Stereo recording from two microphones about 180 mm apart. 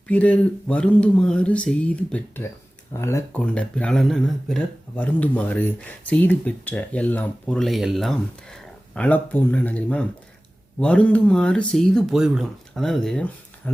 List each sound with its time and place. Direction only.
0.1 s speech: 10° left (ahead or behind)